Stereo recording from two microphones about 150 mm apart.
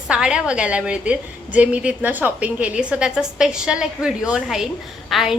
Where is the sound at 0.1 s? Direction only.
5° right (ahead or behind).